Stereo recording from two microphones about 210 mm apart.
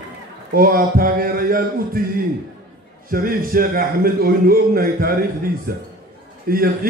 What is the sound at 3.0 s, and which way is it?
A man's voice, 45° right (ahead or behind).